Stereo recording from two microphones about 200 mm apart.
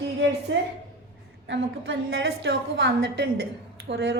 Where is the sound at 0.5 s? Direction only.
65° right (ahead or behind).